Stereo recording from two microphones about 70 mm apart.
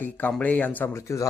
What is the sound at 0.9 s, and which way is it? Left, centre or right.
Speech, left.